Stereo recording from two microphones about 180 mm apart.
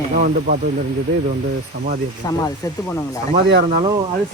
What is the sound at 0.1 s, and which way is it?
Speech, 50° right (ahead or behind).